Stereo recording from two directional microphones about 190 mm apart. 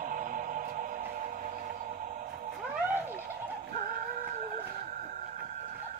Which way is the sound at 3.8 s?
50° right (ahead or behind).